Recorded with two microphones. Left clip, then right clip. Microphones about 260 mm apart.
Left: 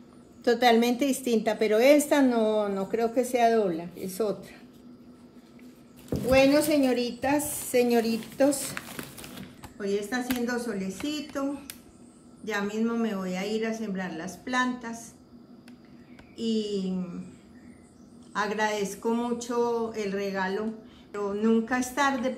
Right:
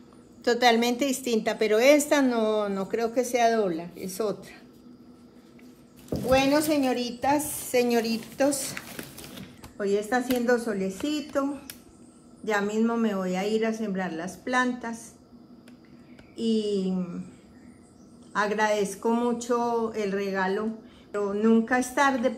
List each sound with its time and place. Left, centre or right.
0.4 s a woman's voice: right
6.2 s a woman's voice: centre
8.7 s a sound: centre
9.8 s speech: centre
12.4 s speech: centre
16.3 s speech: centre
18.3 s speech: centre